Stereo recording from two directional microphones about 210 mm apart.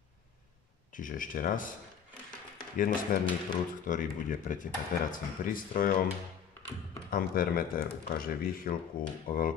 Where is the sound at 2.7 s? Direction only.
40° left (ahead or behind).